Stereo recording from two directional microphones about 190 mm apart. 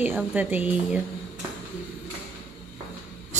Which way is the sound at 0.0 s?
10° right (ahead or behind).